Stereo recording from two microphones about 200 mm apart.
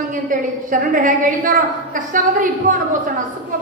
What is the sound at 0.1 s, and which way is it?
A woman's voice, 40° right (ahead or behind).